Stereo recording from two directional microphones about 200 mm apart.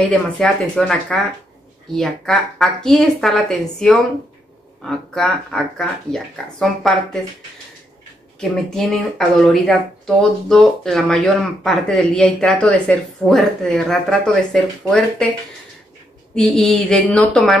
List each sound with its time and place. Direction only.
0.4 s speech: 5° left (ahead or behind)
8.4 s speech: centre (ahead or behind)
16.3 s speech: centre (ahead or behind)